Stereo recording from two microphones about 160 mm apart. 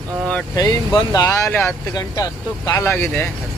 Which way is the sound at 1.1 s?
20° left (ahead or behind).